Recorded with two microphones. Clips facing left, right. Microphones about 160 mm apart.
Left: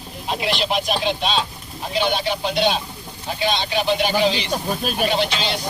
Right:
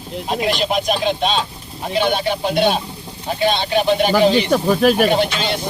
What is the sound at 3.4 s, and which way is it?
Speech, 50° right (ahead or behind).